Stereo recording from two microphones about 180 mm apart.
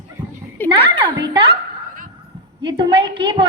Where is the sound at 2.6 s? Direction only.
25° right (ahead or behind).